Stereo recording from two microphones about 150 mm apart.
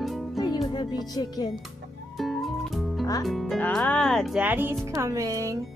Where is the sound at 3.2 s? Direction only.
Centre (ahead or behind).